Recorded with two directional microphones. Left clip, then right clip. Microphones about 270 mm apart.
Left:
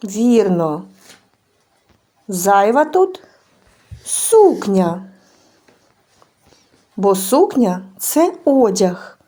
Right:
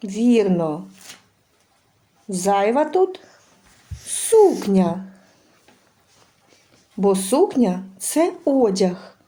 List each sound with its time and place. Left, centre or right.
0.0 s speech: centre
2.3 s speech: centre
6.9 s speech: centre